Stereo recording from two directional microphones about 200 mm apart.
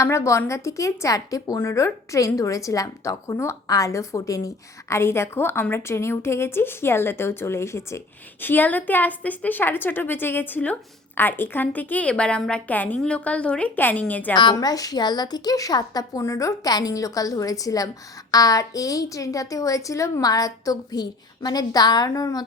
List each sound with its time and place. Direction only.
0.0 s a woman's voice: 15° left (ahead or behind)
14.3 s a woman's voice: 20° left (ahead or behind)